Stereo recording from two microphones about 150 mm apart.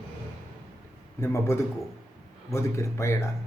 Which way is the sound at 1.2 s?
15° left (ahead or behind).